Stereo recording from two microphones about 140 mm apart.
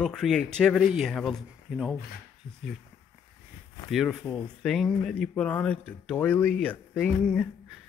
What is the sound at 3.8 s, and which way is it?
Speech, centre (ahead or behind).